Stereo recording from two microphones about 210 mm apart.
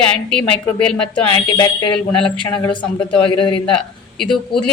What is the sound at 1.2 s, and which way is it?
Speech, 20° left (ahead or behind).